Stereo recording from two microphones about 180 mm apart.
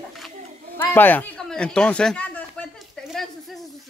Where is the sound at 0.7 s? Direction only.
10° left (ahead or behind).